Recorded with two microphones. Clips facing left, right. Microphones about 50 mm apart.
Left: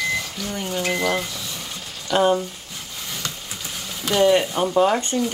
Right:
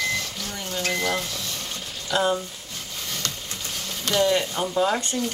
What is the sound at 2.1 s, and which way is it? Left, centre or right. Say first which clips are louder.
Speech: left 5 dB; left.